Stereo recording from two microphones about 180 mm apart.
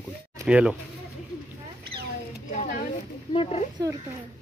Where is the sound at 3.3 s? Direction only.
30° left (ahead or behind).